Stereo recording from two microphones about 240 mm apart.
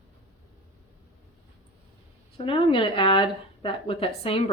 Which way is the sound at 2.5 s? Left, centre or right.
Left.